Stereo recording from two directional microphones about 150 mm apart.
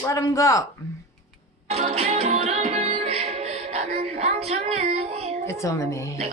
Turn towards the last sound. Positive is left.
turn(degrees=20)  # may be behind; listen again after turning